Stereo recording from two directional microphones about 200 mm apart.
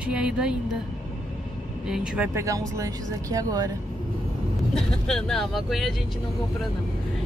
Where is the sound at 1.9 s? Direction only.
10° right (ahead or behind).